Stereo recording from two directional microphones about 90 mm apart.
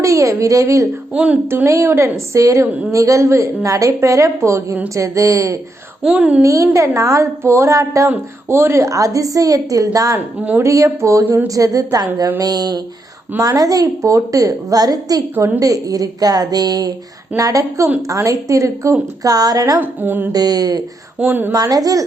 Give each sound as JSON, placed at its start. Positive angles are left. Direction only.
{"t": 0.0, "sound": "a woman's voice", "side_deg": -35}
{"t": 1.1, "sound": "a woman's voice", "side_deg": -15}
{"t": 1.5, "sound": "a woman's voice", "side_deg": -30}
{"t": 6.0, "sound": "a woman's voice", "side_deg": -10}
{"t": 6.4, "sound": "a woman's voice", "side_deg": -35}
{"t": 19.8, "sound": "music", "side_deg": -20}
{"t": 20.3, "sound": "a woman's voice", "side_deg": -45}
{"t": 21.2, "sound": "music", "side_deg": -20}
{"t": 21.5, "sound": "a woman's voice", "side_deg": -45}